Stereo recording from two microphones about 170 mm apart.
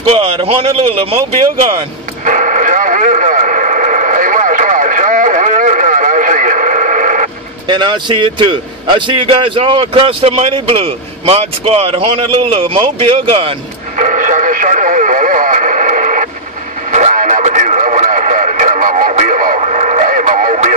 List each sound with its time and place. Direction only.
0.1 s a man's voice: 35° right (ahead or behind)
2.2 s radio: 50° right (ahead or behind)
7.6 s a man's voice: 25° right (ahead or behind)
13.9 s radio: 50° right (ahead or behind)